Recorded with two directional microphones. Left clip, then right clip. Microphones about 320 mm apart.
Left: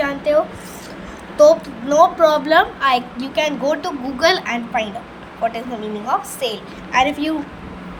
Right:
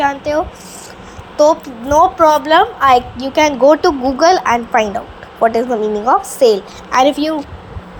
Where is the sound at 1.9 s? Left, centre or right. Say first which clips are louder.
Right 3 dB; right.